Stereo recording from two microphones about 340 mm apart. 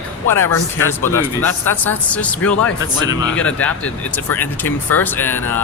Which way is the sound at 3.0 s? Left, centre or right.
Centre.